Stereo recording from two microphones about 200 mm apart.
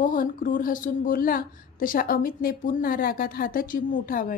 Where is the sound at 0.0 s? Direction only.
40° left (ahead or behind).